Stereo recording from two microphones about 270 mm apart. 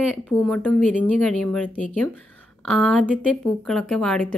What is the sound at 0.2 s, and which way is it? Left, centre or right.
Speech, centre.